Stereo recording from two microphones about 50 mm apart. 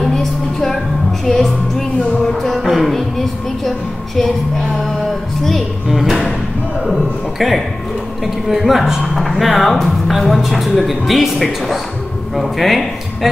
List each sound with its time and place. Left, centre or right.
0.0 s music: centre
1.2 s speech: centre
2.4 s music: centre
5.4 s music: centre
6.9 s a sound: centre
8.5 s speech: centre